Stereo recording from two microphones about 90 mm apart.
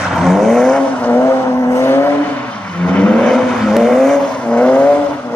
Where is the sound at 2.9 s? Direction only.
10° left (ahead or behind).